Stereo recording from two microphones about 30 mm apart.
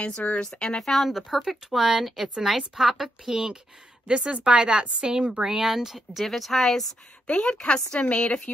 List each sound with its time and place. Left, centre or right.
0.1 s speech: left
0.6 s speech: left
0.8 s speech: centre
1.1 s speech: centre
4.1 s a woman's voice: right
5.3 s speech: centre
6.2 s speech: centre
7.2 s a woman's voice: left